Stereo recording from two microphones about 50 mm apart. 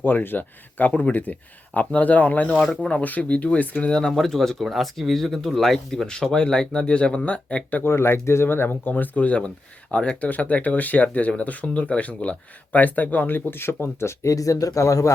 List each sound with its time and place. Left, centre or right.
0.0 s speech: left; by 4.1 s centre
4.1 s speech: centre
6.1 s speech: centre
7.9 s speech: left
8.9 s speech: left
14.0 s speech: left